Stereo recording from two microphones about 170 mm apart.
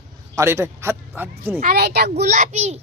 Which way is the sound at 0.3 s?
15° right (ahead or behind).